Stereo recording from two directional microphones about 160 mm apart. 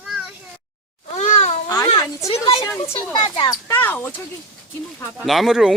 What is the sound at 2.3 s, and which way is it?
A woman's voice, 40° left (ahead or behind).